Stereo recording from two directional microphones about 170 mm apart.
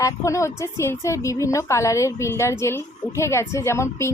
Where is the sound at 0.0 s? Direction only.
20° left (ahead or behind).